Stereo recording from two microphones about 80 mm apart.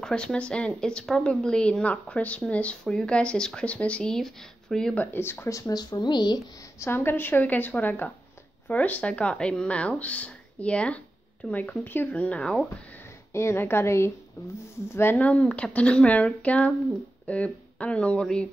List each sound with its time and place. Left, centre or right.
0.0 s speech: centre
4.9 s a woman's voice: left
5.5 s speech: left
5.8 s speech: left
6.8 s a woman's voice: left; by 12.6 s centre
13.3 s a woman's voice: left
15.1 s speech: centre